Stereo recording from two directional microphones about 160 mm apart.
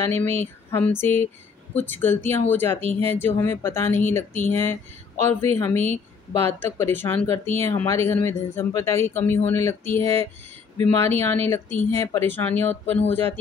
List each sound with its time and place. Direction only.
0.0 s speech: 15° left (ahead or behind)